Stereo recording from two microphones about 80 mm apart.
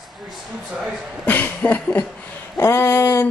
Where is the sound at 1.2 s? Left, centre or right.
Left.